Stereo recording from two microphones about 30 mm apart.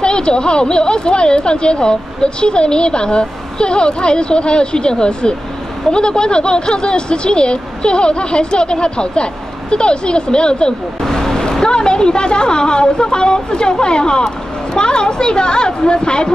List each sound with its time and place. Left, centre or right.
0.0 s speech: left
11.0 s vehicle: centre
11.6 s speech: left